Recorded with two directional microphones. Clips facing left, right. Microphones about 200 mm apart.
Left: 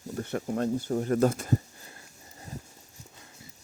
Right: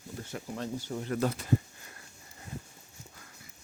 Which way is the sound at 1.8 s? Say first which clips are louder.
Left 2 dB; 30° left (ahead or behind).